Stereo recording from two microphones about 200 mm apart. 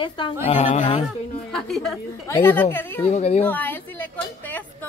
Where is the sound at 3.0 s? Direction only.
30° left (ahead or behind).